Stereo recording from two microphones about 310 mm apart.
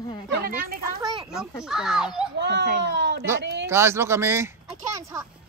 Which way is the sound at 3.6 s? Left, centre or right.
Centre.